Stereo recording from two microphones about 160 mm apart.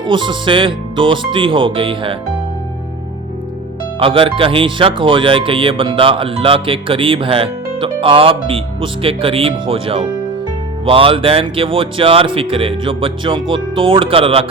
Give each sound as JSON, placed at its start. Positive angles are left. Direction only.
{"t": 0.0, "sound": "speech", "side_deg": -30}
{"t": 4.0, "sound": "speech", "side_deg": -35}